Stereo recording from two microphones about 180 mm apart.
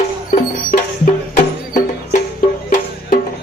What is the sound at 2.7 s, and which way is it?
Music, 55° left (ahead or behind).